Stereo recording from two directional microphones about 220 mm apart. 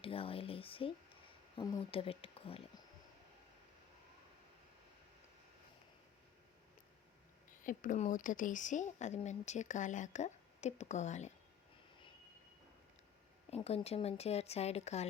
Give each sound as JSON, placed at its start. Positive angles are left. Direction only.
{"t": 0.0, "sound": "speech", "side_deg": 25}
{"t": 7.6, "sound": "speech", "side_deg": 35}
{"t": 13.5, "sound": "speech", "side_deg": 25}